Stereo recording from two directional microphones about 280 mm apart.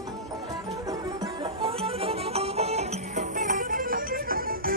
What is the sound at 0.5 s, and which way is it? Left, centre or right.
Music, centre.